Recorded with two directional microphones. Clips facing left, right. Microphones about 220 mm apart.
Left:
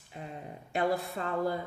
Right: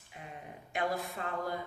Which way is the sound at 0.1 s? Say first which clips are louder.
Left 5 dB; 35° left (ahead or behind).